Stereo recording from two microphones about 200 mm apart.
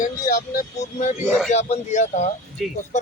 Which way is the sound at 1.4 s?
35° left (ahead or behind).